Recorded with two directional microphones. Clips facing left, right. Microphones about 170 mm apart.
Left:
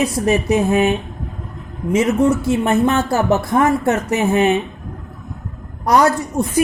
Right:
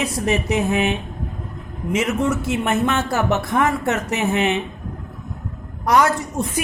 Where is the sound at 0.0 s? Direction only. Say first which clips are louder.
Left 4 dB; 35° left (ahead or behind).